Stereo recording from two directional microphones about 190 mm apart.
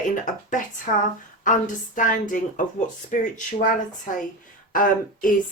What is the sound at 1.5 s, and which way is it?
Speech, 45° left (ahead or behind).